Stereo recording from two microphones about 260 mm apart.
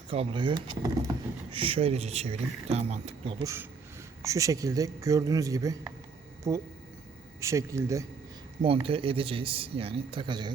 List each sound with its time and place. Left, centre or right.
0.1 s speech: right